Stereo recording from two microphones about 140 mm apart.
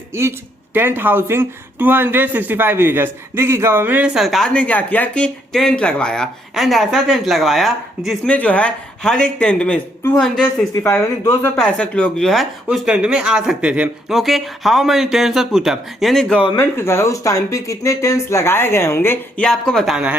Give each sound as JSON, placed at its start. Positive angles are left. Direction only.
{"t": 0.1, "sound": "speech", "side_deg": -20}
{"t": 11.5, "sound": "speech", "side_deg": 5}
{"t": 16.6, "sound": "speech", "side_deg": 20}
{"t": 19.5, "sound": "speech", "side_deg": 5}